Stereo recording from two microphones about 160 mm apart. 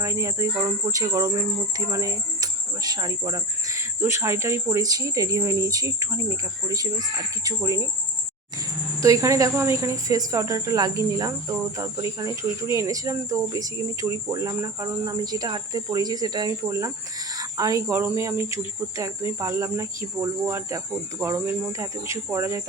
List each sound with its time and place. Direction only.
0.0 s cricket: 20° right (ahead or behind)
9.0 s cricket: 20° right (ahead or behind)
17.3 s speech: 20° right (ahead or behind)
18.5 s cricket: 20° right (ahead or behind)
20.4 s speech: 15° right (ahead or behind)